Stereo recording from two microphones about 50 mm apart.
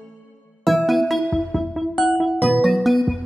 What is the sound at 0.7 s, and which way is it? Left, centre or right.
Music, centre.